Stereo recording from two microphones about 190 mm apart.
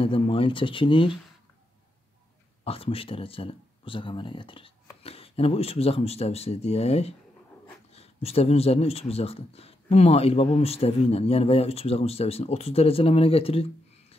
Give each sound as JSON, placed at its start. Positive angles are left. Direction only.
{"t": 0.0, "sound": "speech", "side_deg": 30}
{"t": 2.6, "sound": "speech", "side_deg": 30}